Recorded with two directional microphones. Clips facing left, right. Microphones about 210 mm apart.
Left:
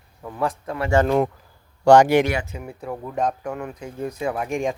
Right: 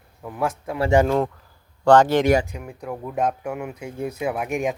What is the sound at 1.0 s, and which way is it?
A man's voice, 15° left (ahead or behind).